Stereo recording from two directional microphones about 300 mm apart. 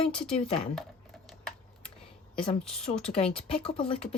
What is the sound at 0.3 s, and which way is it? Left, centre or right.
Speech, centre.